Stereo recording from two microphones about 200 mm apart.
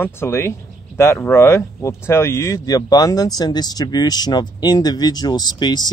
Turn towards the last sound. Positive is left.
turn(degrees=20)  # may be behind; listen again after turning